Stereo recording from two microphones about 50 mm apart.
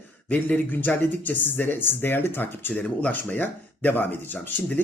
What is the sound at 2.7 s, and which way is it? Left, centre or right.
Speech, left.